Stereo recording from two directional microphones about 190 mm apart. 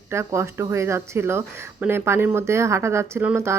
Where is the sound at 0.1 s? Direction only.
15° right (ahead or behind).